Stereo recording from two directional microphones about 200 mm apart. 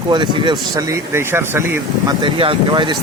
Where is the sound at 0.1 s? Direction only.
25° right (ahead or behind).